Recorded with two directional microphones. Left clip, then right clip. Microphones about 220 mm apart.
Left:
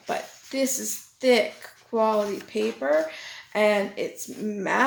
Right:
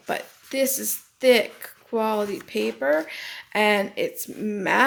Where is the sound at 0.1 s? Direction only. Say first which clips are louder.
Right 1 dB; 35° right (ahead or behind).